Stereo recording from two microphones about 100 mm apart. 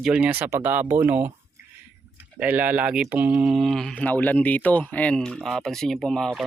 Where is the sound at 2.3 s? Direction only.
15° right (ahead or behind).